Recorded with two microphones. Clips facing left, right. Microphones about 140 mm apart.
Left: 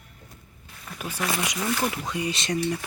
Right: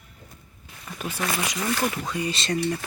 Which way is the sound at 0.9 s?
10° left (ahead or behind).